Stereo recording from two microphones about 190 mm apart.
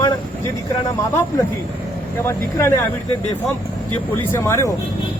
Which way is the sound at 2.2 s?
15° left (ahead or behind).